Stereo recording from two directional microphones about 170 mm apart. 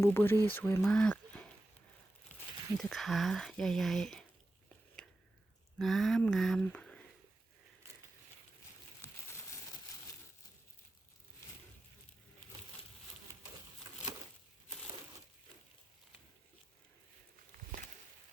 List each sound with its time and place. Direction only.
0.0 s speech: 15° left (ahead or behind)
2.7 s speech: centre (ahead or behind)
5.0 s a sound: 5° left (ahead or behind)
5.8 s speech: centre (ahead or behind)